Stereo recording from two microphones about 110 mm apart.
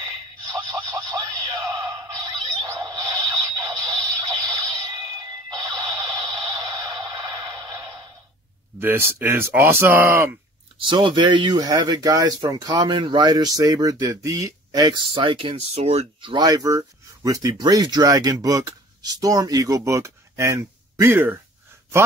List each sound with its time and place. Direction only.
0.5 s music: 35° right (ahead or behind)
8.7 s speech: 20° right (ahead or behind)
10.8 s speech: 50° right (ahead or behind)
15.5 s speech: 80° right; by 21.4 s 20° right (ahead or behind)